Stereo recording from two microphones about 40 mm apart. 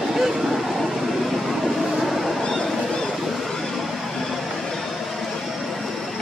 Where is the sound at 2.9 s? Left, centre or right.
Centre.